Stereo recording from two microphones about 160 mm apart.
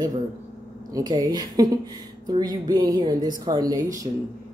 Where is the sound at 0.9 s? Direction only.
25° right (ahead or behind).